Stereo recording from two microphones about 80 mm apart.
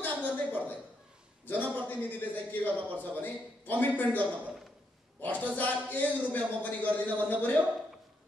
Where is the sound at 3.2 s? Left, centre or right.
Left.